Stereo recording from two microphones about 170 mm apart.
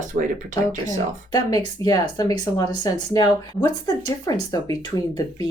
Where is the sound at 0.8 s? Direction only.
20° left (ahead or behind).